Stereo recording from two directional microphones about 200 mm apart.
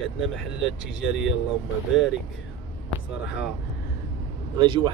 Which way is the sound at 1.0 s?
Centre (ahead or behind).